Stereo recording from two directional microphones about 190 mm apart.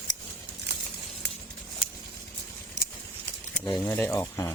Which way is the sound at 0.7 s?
60° right (ahead or behind).